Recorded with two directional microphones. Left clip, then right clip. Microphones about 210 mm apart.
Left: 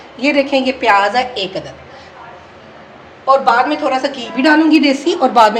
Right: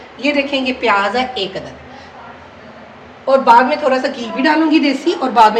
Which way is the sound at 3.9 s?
30° left (ahead or behind).